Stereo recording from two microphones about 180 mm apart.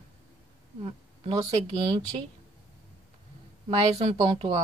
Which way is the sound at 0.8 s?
30° right (ahead or behind).